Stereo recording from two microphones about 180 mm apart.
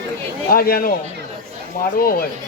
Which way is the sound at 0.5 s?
55° left (ahead or behind).